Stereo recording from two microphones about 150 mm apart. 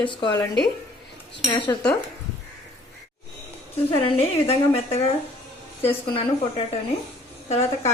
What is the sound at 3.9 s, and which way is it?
A woman's voice, 40° left (ahead or behind).